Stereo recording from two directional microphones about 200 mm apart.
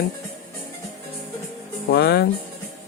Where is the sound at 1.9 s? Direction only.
55° left (ahead or behind).